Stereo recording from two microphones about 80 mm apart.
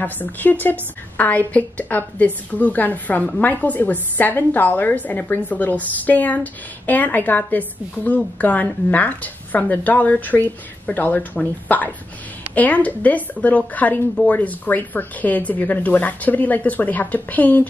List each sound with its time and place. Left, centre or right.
0.0 s a woman's voice: left